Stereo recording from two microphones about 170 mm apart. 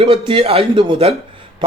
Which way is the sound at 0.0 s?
35° right (ahead or behind).